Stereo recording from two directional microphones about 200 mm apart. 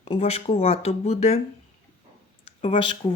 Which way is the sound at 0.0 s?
30° left (ahead or behind).